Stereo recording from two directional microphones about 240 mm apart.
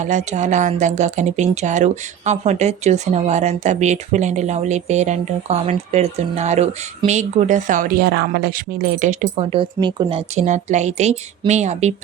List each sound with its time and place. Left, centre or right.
0.0 s speech: right